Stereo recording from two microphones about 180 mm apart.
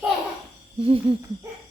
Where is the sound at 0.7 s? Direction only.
30° right (ahead or behind).